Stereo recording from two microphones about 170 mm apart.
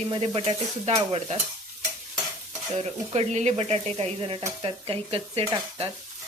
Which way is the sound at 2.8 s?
40° right (ahead or behind).